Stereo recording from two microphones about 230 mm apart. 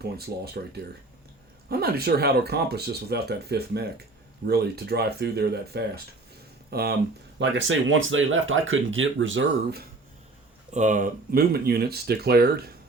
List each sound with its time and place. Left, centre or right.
0.0 s speech: right
1.7 s speech: right
10.7 s speech: right